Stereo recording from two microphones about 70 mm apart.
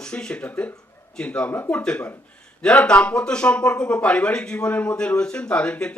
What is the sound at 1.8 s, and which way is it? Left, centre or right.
Speech, centre.